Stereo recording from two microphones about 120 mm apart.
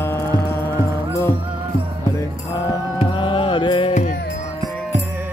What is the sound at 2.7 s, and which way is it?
Music, 45° left (ahead or behind).